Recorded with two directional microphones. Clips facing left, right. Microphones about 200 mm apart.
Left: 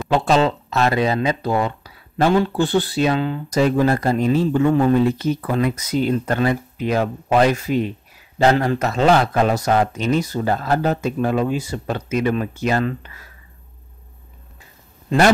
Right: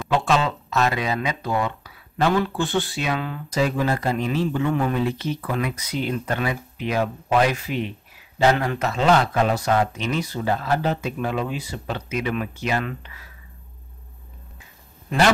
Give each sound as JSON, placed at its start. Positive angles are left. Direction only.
{"t": 0.2, "sound": "speech", "side_deg": 35}
{"t": 3.4, "sound": "speech", "side_deg": 45}